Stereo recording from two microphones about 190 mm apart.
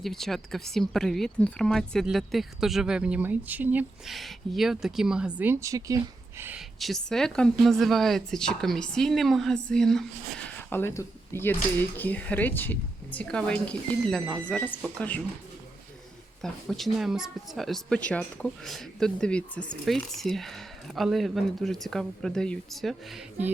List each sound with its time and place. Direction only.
0.0 s speech: centre (ahead or behind); by 6.0 s 15° right (ahead or behind)
6.7 s speech: centre (ahead or behind)
16.4 s speech: centre (ahead or behind)